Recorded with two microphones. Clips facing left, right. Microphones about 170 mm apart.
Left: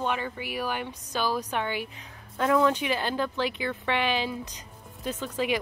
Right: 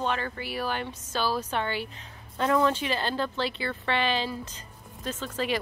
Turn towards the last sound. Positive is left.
turn(degrees=15)  # may be behind; listen again after turning